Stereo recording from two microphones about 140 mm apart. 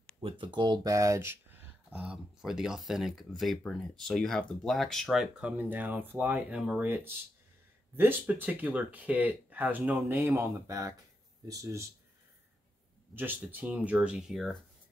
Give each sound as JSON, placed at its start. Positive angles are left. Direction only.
{"t": 0.2, "sound": "speech", "side_deg": -40}
{"t": 0.6, "sound": "speech", "side_deg": -25}
{"t": 7.9, "sound": "speech", "side_deg": -15}
{"t": 13.1, "sound": "speech", "side_deg": -15}